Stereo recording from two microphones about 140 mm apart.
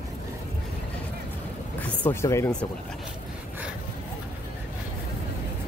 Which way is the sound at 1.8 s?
15° left (ahead or behind).